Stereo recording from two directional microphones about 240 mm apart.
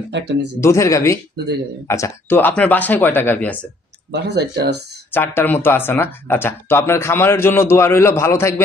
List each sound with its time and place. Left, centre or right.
0.1 s speech: right
0.6 s speech: centre
4.1 s speech: right
5.1 s speech: centre